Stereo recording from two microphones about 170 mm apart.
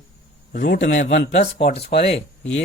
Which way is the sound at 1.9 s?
75° left (ahead or behind).